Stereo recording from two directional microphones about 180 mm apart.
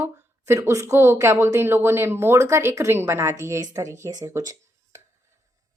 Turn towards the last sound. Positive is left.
turn(degrees=-20)  # may be behind; listen again after turning